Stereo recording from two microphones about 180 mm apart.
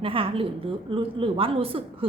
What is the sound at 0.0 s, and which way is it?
A woman's voice, 30° right (ahead or behind).